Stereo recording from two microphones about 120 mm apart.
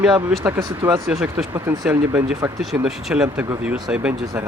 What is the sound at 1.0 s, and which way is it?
Speech, centre (ahead or behind).